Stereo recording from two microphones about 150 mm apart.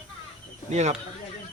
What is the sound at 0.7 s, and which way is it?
Speech, 50° right (ahead or behind).